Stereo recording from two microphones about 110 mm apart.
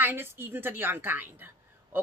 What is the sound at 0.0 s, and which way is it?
A woman's voice, 20° right (ahead or behind).